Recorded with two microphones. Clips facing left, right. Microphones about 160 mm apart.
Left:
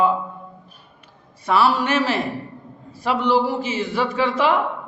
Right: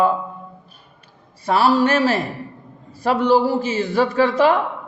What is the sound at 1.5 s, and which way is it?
A man's voice, 35° right (ahead or behind).